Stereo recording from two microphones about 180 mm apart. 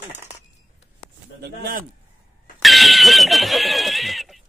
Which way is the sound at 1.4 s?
60° right (ahead or behind).